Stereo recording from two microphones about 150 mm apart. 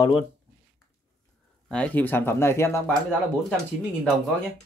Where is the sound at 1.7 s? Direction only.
10° left (ahead or behind).